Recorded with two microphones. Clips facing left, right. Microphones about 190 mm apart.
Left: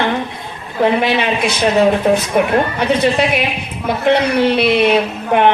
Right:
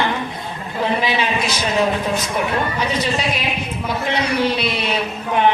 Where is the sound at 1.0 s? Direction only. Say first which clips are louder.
Left 4 dB; 60° left (ahead or behind).